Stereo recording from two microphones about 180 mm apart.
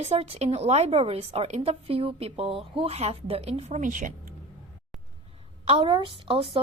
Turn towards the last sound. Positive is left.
turn(degrees=-30)  # may be behind; listen again after turning